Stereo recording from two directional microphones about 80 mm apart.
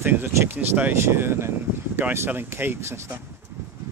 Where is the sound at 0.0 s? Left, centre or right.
Right.